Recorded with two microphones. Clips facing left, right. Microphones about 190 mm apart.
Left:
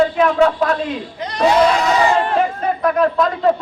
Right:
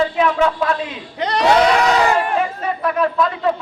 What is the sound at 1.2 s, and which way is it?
Speech, 75° right (ahead or behind).